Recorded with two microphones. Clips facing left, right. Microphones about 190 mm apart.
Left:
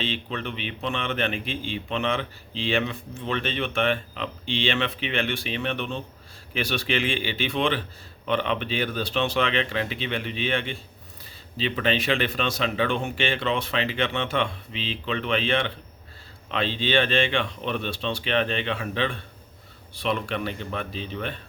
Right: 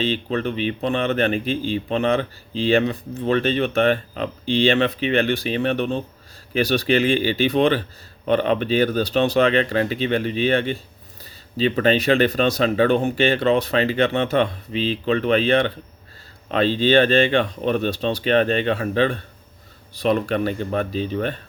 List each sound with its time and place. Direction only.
0.0 s speech: 40° right (ahead or behind)